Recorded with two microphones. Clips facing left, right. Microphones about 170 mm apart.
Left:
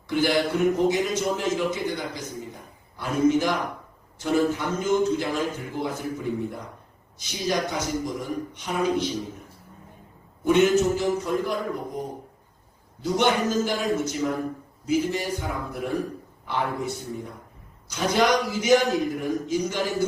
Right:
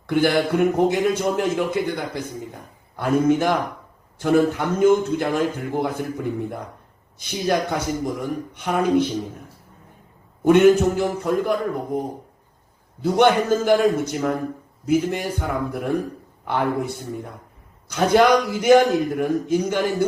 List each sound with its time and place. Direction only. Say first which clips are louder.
0.1 s a man's voice: right 4 dB; 55° right (ahead or behind)
10.4 s a man's voice: right 5 dB; 55° right (ahead or behind)
13.0 s a man's voice: right 6 dB; 55° right (ahead or behind)